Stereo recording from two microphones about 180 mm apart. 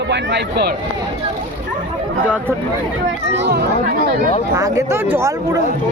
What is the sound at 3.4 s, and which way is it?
Speech, 70° right (ahead or behind).